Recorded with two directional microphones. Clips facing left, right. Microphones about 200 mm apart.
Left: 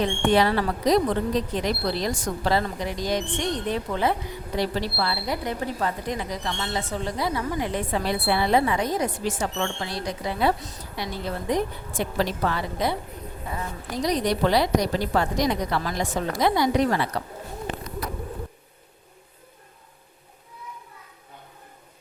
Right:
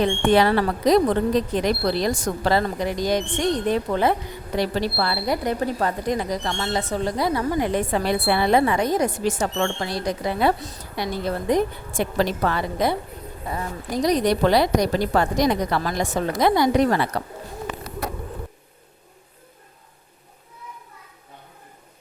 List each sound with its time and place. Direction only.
0.0 s a woman's voice: 60° right (ahead or behind)
9.0 s speech: 75° right (ahead or behind)
9.4 s a woman's voice: 50° right (ahead or behind)